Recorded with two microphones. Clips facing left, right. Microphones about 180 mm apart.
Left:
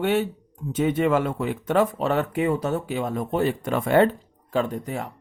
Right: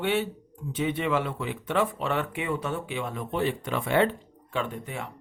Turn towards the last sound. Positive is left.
turn(degrees=40)  # may be behind; listen again after turning